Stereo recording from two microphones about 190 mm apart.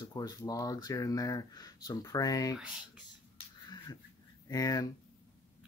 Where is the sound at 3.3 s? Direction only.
25° left (ahead or behind).